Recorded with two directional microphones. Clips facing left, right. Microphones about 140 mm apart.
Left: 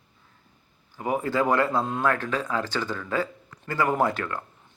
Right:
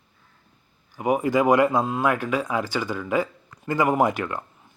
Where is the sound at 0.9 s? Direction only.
15° right (ahead or behind).